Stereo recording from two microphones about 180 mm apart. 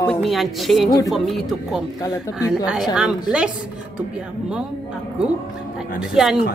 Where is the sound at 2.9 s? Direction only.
5° right (ahead or behind).